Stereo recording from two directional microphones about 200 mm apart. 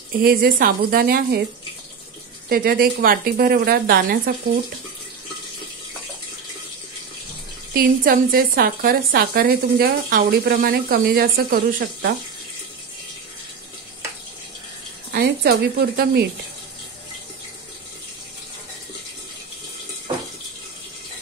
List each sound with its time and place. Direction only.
0.2 s a woman's voice: 45° right (ahead or behind)
2.5 s a woman's voice: 50° right (ahead or behind)
7.7 s a woman's voice: 45° right (ahead or behind)
15.1 s a woman's voice: 55° right (ahead or behind)